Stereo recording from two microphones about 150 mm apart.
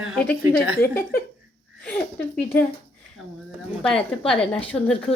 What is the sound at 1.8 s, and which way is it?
Speech, 10° left (ahead or behind).